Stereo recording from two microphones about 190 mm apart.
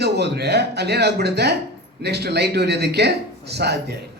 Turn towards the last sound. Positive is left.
turn(degrees=-60)  # may be behind; listen again after turning